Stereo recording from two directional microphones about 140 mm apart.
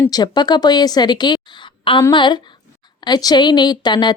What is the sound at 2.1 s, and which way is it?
A woman's voice, 35° left (ahead or behind).